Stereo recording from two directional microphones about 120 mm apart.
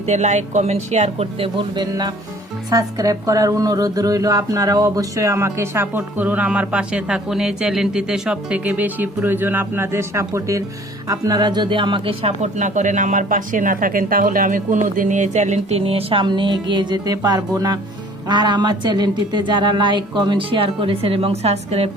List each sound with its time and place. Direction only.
0.0 s a woman's voice: 70° right (ahead or behind); by 12.3 s 45° right (ahead or behind)
12.4 s music: 90° right; by 15.8 s 75° right (ahead or behind)
15.8 s a woman's voice: 50° right (ahead or behind)